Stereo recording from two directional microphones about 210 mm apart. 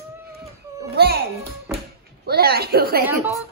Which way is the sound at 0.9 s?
50° right (ahead or behind).